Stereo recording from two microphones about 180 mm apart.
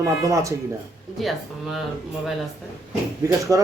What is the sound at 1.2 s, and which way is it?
Speech, centre (ahead or behind).